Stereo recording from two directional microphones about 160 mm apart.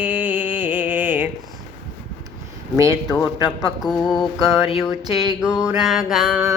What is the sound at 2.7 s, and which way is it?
Speech, 20° right (ahead or behind).